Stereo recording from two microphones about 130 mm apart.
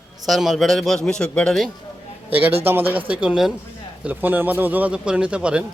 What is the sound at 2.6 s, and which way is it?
A man's voice, 15° right (ahead or behind).